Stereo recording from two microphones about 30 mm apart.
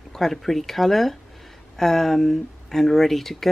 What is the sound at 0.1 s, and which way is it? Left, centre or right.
Speech, centre.